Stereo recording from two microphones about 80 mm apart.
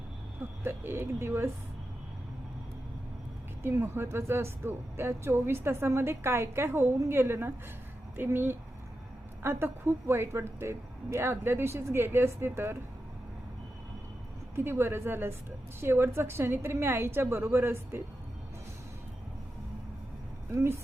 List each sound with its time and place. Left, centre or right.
0.6 s speech: right
3.6 s speech: right
14.5 s speech: right
20.5 s speech: right